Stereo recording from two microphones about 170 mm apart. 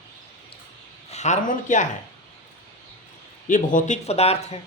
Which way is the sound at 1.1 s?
45° left (ahead or behind).